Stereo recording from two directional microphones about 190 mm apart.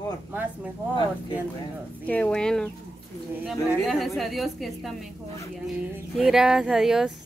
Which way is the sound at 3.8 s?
Centre (ahead or behind).